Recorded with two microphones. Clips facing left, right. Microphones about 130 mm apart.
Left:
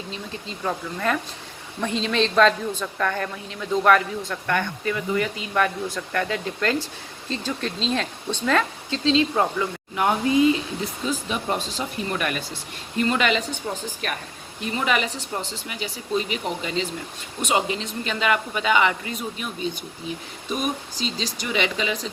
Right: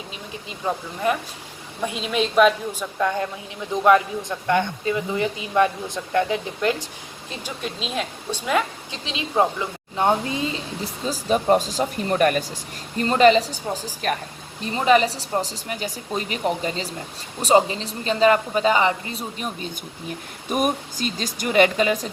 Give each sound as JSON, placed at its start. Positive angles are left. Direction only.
{"t": 0.1, "sound": "a woman's voice", "side_deg": -15}
{"t": 9.9, "sound": "speech", "side_deg": -30}
{"t": 20.5, "sound": "speech", "side_deg": -50}